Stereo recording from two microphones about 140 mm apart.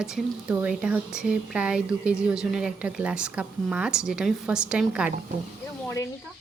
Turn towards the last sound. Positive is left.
turn(degrees=20)  # may be behind; listen again after turning